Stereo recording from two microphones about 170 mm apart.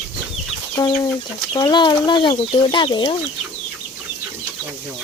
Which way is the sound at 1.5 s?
25° left (ahead or behind).